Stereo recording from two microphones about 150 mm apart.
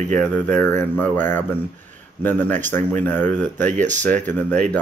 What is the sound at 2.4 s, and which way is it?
Speech, 55° right (ahead or behind).